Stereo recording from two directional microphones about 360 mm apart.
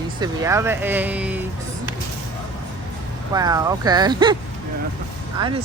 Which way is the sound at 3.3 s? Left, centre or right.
Centre.